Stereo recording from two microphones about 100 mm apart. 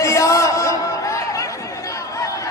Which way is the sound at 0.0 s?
30° left (ahead or behind).